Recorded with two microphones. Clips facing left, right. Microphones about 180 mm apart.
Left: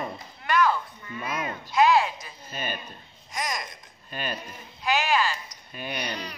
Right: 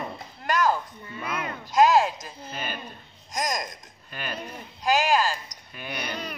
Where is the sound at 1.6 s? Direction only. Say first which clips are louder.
Right 2 dB; 45° right (ahead or behind).